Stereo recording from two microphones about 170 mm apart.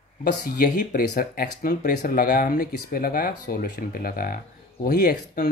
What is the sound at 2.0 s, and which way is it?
Speech, 65° left (ahead or behind).